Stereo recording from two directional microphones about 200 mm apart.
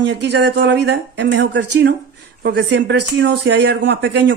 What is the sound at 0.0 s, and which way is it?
Speech, 55° right (ahead or behind).